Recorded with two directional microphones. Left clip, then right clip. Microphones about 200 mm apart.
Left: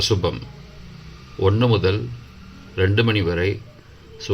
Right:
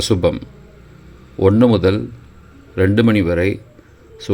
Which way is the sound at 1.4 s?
35° right (ahead or behind).